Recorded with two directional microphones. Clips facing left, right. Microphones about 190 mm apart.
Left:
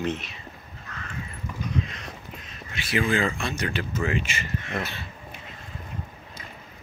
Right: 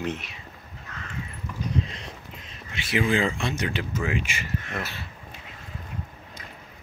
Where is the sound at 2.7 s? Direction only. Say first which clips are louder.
Even; 20° right (ahead or behind).